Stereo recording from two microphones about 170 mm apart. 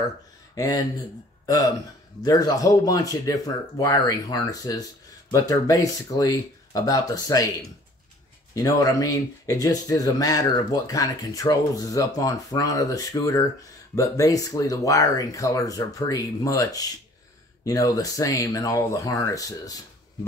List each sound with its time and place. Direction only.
0.6 s speech: 25° left (ahead or behind)
8.5 s speech: 20° left (ahead or behind)